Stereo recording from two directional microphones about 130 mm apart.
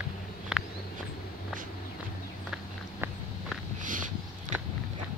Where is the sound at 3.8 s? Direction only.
90° right.